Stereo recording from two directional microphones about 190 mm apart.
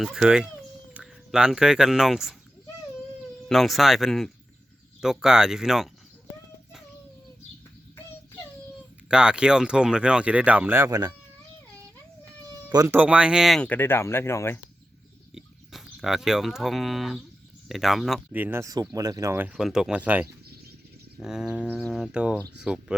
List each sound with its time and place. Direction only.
0.0 s speech: centre (ahead or behind)
3.5 s speech: centre (ahead or behind)
9.0 s speech: 5° right (ahead or behind)
12.6 s speech: 15° right (ahead or behind); by 14.6 s 10° left (ahead or behind)
15.4 s speech: centre (ahead or behind)